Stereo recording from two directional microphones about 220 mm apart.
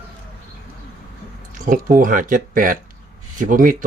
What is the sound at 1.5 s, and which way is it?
Speech, 40° right (ahead or behind).